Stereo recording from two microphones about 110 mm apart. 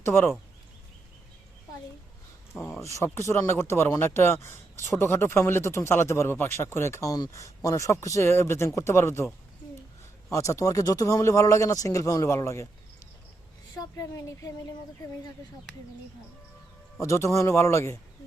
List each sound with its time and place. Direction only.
0.0 s speech: 20° left (ahead or behind)
2.8 s speech: 25° left (ahead or behind)
13.7 s a woman's voice: 30° left (ahead or behind)
17.0 s speech: 30° left (ahead or behind)